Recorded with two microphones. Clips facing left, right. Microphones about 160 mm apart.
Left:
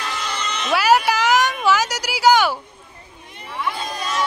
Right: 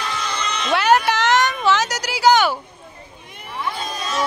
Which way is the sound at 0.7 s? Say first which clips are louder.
Even; 5° left (ahead or behind).